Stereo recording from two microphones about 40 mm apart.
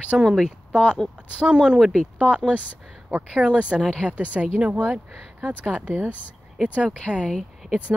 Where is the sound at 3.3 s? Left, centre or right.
Right.